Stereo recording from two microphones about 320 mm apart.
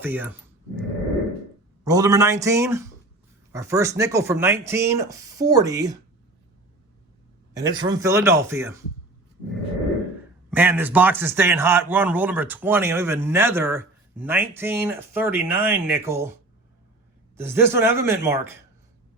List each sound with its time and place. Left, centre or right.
0.0 s speech: centre
1.8 s speech: centre
7.5 s speech: centre
10.5 s speech: centre
17.3 s speech: centre